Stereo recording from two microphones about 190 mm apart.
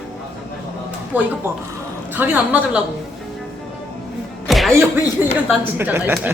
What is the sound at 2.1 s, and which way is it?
Speech, 10° right (ahead or behind).